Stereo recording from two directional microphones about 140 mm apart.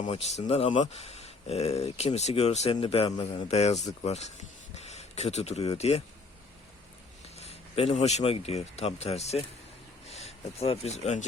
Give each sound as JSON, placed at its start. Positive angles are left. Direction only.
{"t": 0.1, "sound": "speech", "side_deg": 50}
{"t": 7.3, "sound": "speech", "side_deg": 45}